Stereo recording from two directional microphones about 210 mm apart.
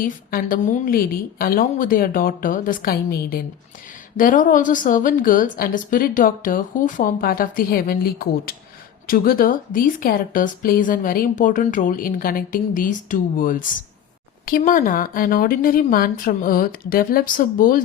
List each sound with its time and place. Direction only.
0.0 s a woman's voice: 45° left (ahead or behind)